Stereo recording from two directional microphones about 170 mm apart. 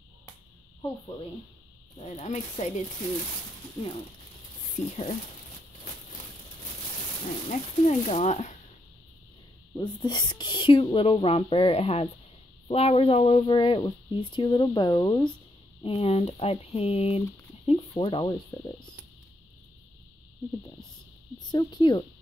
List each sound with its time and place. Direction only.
2.0 s speech: 40° left (ahead or behind)
4.7 s speech: 40° left (ahead or behind)
7.4 s speech: 45° left (ahead or behind)
9.8 s speech: 25° left (ahead or behind)
15.8 s speech: 35° left (ahead or behind)
18.5 s insect: 20° left (ahead or behind)
21.5 s speech: 25° left (ahead or behind)